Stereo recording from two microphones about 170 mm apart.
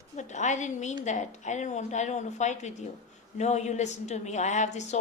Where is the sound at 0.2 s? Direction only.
45° left (ahead or behind).